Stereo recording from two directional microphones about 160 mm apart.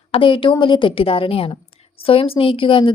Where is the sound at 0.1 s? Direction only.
35° left (ahead or behind).